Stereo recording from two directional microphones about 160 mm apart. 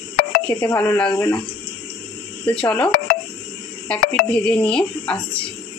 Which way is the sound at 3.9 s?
5° left (ahead or behind).